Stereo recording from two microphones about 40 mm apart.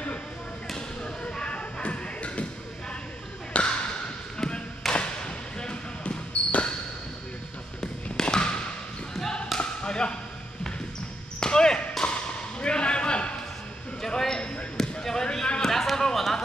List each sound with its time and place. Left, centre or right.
0.7 s music: left
3.5 s a sound: left
4.4 s basketball bounce: left
6.4 s basketball bounce: left
7.8 s basketball bounce: centre
9.6 s tap: left
11.3 s basketball bounce: centre
12.0 s tap: left
12.5 s a sound: left
14.8 s basketball bounce: centre
15.6 s a sound: centre